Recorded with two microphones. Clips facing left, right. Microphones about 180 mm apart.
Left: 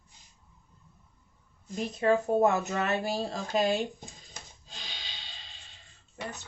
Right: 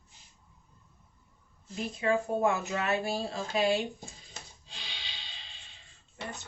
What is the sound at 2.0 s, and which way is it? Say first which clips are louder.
A woman's voice: left 4 dB; 40° left (ahead or behind).